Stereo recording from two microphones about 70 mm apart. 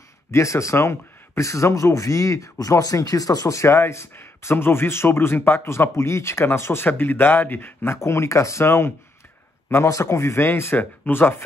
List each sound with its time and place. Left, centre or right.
0.3 s speech: left